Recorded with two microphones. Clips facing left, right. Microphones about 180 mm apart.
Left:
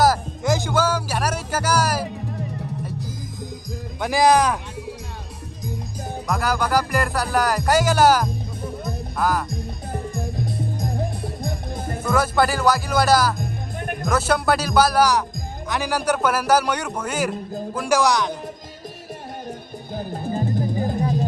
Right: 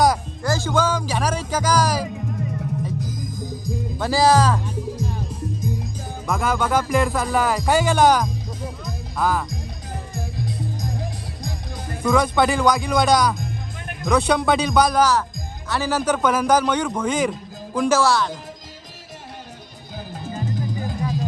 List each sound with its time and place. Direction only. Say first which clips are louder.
0.4 s music: left 2 dB; 20° left (ahead or behind)
0.7 s a man's voice: even; 10° left (ahead or behind)
4.0 s a man's voice: even; 15° left (ahead or behind)
6.2 s speech: right 1 dB; centre (ahead or behind)
8.6 s music: left 6 dB; 60° left (ahead or behind)
9.1 s speech: even; centre (ahead or behind)
10.2 s music: right 1 dB; 60° left (ahead or behind)
12.0 s a man's voice: right 2 dB; 5° left (ahead or behind)
20.0 s music: left 4 dB; 50° left (ahead or behind)